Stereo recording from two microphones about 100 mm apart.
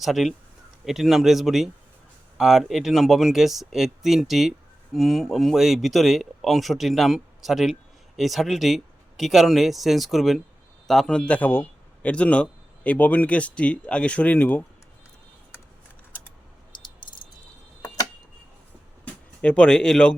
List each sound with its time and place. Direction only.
0.0 s speech: centre (ahead or behind); by 14.6 s 15° left (ahead or behind)
16.7 s a sound: 50° left (ahead or behind)
19.0 s speech: 10° left (ahead or behind)